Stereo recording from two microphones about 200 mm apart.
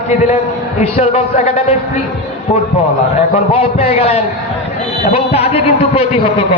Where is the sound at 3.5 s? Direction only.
30° left (ahead or behind).